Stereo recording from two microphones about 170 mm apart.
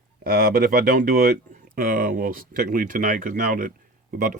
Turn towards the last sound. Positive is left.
turn(degrees=-55)  # may be behind; listen again after turning